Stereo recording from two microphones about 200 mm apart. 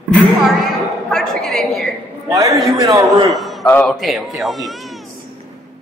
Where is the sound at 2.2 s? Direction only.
15° right (ahead or behind).